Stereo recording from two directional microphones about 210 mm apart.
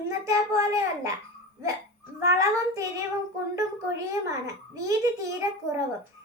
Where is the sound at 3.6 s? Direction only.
15° right (ahead or behind).